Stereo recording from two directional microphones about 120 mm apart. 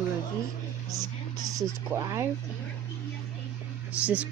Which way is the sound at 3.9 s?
10° right (ahead or behind).